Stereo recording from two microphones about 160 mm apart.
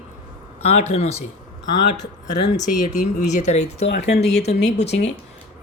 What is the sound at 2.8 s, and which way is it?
Speech, 50° left (ahead or behind).